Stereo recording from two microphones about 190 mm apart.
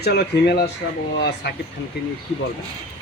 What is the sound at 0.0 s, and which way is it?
Speech, 60° left (ahead or behind).